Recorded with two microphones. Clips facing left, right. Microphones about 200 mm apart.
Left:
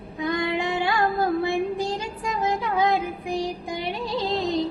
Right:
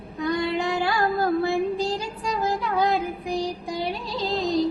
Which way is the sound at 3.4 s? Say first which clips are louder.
Right 1 dB; 20° left (ahead or behind).